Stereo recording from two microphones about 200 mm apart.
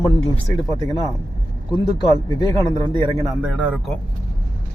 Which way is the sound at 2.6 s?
20° right (ahead or behind).